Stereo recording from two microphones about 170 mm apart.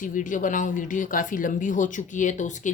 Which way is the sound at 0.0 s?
50° left (ahead or behind).